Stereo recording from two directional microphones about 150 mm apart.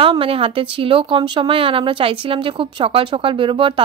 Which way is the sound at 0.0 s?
35° right (ahead or behind).